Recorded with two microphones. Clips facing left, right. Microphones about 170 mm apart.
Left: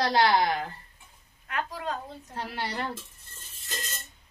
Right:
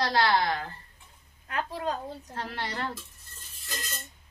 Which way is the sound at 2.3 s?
10° left (ahead or behind).